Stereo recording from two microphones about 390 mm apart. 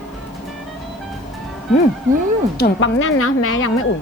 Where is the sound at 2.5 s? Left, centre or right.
Left.